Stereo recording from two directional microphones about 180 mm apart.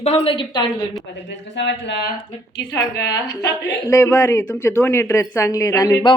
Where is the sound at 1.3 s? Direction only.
80° left.